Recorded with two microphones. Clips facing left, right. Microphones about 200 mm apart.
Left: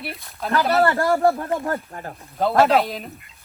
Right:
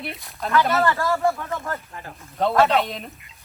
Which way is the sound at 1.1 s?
35° left (ahead or behind).